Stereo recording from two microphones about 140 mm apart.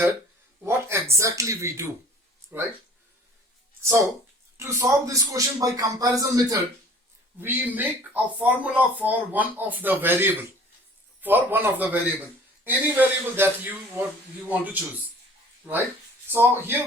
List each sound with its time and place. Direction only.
0.6 s a man's voice: 20° right (ahead or behind)
4.5 s a man's voice: 20° right (ahead or behind)